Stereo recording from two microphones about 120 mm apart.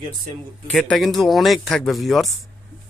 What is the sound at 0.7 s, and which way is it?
Speech, 5° left (ahead or behind).